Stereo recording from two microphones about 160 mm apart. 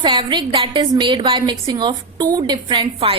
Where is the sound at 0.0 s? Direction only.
30° right (ahead or behind).